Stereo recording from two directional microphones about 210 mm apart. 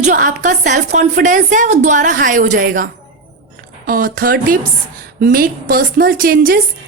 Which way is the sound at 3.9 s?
40° right (ahead or behind).